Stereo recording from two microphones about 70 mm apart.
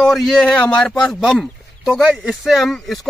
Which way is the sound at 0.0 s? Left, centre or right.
Centre.